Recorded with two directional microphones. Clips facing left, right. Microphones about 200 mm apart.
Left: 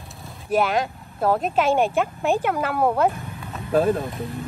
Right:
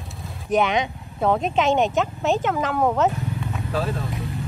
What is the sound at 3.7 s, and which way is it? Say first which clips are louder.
Speech: left 8 dB; 55° left (ahead or behind).